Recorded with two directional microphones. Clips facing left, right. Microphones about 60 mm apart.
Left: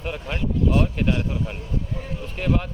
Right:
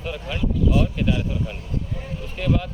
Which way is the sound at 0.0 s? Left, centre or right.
Left.